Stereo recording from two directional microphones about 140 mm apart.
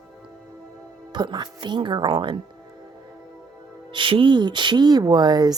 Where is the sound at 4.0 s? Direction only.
40° right (ahead or behind).